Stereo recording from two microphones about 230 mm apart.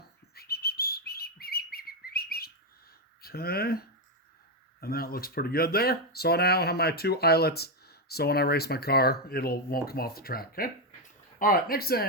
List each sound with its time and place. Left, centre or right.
0.3 s bird: left
3.2 s speech: left